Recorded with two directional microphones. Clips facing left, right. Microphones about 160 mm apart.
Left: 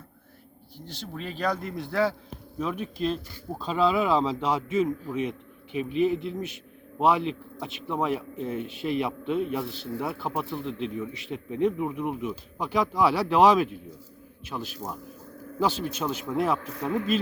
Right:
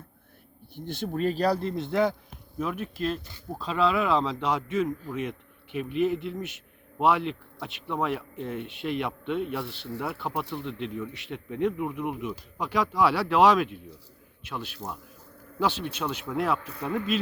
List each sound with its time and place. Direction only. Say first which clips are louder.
0.8 s speech: right 9 dB; 55° right (ahead or behind); by 2.1 s 20° right (ahead or behind)
2.6 s speech: left 1 dB; 5° right (ahead or behind)